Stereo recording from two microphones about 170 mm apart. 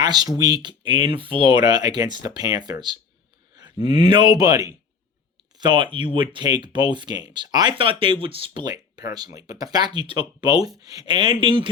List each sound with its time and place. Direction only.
0.0 s speech: 25° right (ahead or behind)